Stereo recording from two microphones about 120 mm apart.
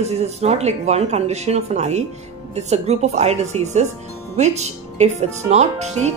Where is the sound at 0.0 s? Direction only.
65° right (ahead or behind).